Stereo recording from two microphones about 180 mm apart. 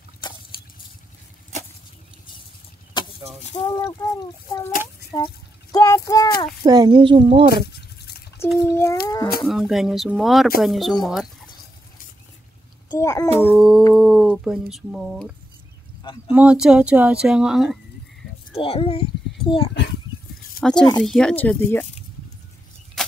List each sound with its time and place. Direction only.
2.9 s chicken: 25° left (ahead or behind)
3.5 s speech: 20° left (ahead or behind)
5.1 s a sound: 20° left (ahead or behind)
6.6 s a woman's voice: 20° right (ahead or behind)
7.5 s a sound: 60° left (ahead or behind)
8.6 s speech: 15° left (ahead or behind)
9.4 s speech: centre (ahead or behind)
12.9 s speech: 20° left (ahead or behind)
13.6 s humming: centre (ahead or behind)
13.9 s speech: 5° right (ahead or behind)
18.6 s a child's voice: 30° left (ahead or behind)
20.6 s a sound: 55° left (ahead or behind)
21.0 s speech: 5° left (ahead or behind)